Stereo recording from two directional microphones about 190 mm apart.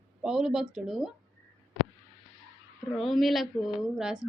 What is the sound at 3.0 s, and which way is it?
A woman's voice, centre (ahead or behind).